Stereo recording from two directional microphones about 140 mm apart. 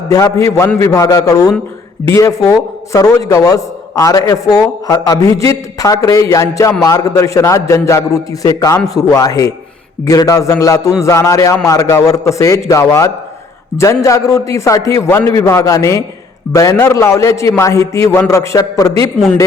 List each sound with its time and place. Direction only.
0.1 s a man's voice: 25° left (ahead or behind)